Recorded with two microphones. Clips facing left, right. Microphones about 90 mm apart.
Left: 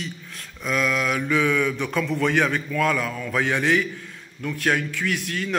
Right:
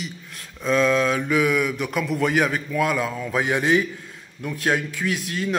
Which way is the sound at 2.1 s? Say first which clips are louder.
Right 1 dB; 15° right (ahead or behind).